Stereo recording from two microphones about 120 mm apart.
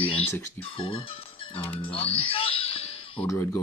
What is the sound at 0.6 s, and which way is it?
Music, 50° left (ahead or behind).